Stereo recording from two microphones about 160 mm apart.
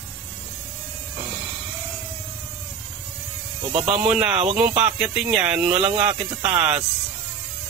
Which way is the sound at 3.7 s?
40° right (ahead or behind).